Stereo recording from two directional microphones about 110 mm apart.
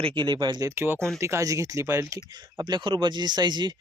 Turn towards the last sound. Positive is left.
turn(degrees=-45)  # may be behind; listen again after turning